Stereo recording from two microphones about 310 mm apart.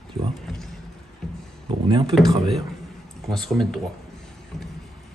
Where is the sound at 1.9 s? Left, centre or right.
Centre.